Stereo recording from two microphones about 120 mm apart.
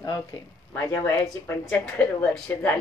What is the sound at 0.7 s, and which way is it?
Speech, 15° left (ahead or behind).